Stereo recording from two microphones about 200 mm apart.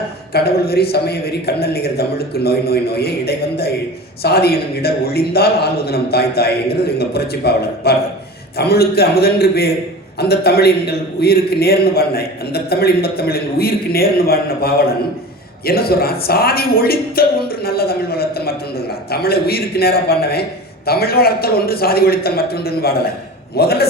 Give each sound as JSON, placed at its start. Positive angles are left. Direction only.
{"t": 0.3, "sound": "a man's voice", "side_deg": 50}